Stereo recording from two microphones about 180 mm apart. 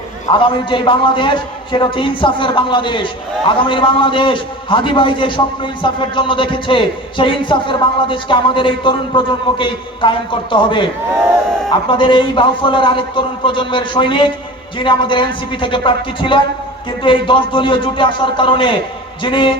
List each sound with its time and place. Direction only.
0.3 s a man's voice: 30° left (ahead or behind)